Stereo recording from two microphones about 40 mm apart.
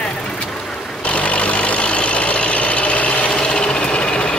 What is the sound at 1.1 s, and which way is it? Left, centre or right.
Vehicle, left.